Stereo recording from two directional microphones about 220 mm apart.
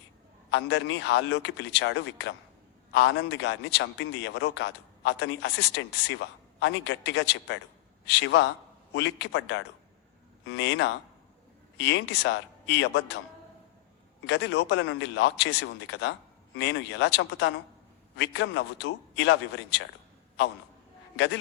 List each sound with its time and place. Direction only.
0.5 s a man's voice: 55° left (ahead or behind)
14.3 s a man's voice: 50° left (ahead or behind)